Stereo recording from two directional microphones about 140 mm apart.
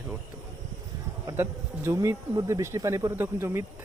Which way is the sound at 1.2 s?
15° right (ahead or behind).